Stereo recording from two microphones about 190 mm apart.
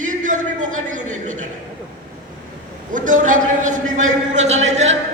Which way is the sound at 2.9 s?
45° right (ahead or behind).